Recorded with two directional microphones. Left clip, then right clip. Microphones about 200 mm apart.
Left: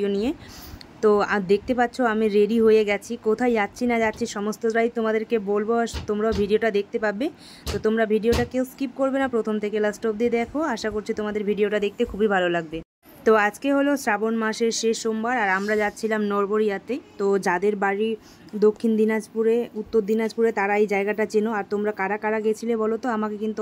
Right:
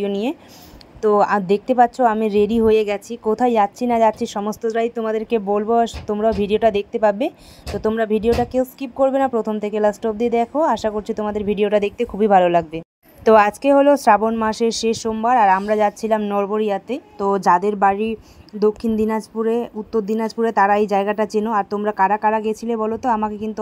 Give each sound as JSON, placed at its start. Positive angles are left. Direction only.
{"t": 0.0, "sound": "a woman's voice", "side_deg": -15}